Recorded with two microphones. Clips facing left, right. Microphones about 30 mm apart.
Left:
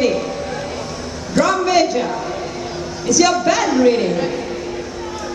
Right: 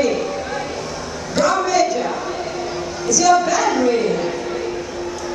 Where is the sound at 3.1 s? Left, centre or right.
Left.